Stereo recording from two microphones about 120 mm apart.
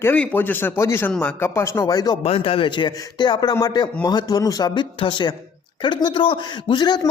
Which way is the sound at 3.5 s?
30° left (ahead or behind).